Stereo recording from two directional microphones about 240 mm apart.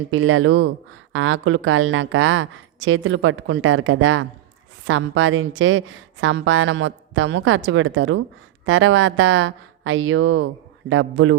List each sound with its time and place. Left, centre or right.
0.1 s a woman's voice: right